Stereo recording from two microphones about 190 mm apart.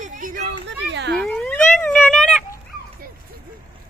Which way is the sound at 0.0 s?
45° right (ahead or behind).